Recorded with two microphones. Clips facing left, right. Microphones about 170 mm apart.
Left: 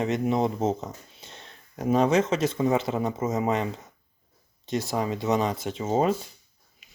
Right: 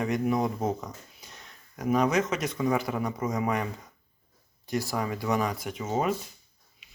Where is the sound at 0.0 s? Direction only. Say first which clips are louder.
Left 2 dB; 25° left (ahead or behind).